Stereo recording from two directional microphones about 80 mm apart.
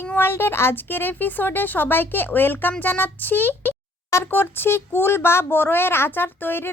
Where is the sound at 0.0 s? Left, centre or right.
Left.